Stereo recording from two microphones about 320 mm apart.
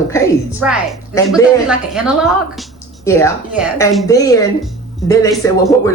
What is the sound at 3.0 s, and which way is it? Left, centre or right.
Speech, centre.